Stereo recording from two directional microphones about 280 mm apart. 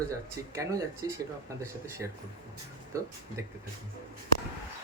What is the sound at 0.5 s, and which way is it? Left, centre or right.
Speech, centre.